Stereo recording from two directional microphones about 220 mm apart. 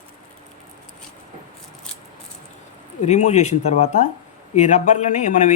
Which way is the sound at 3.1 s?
30° left (ahead or behind).